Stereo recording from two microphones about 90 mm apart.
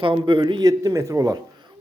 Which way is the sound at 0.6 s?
40° right (ahead or behind).